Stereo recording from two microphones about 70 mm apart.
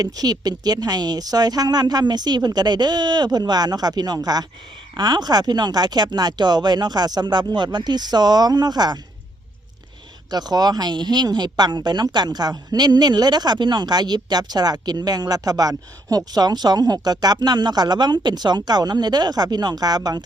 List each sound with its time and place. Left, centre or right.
0.0 s speech: right
4.9 s speech: right
10.3 s speech: right